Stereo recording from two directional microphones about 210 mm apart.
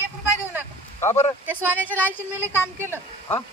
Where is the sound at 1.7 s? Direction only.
10° left (ahead or behind).